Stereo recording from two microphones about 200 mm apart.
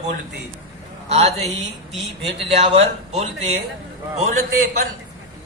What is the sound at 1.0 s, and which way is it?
Speech, 30° right (ahead or behind).